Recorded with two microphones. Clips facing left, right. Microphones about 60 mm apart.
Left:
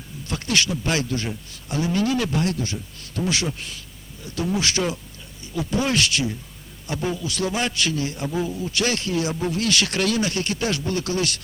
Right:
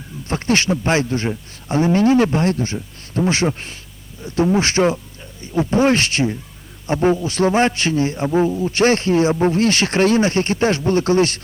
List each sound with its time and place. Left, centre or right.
0.3 s a man's voice: right